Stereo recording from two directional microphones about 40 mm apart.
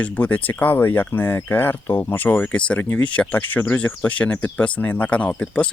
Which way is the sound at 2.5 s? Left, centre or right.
Left.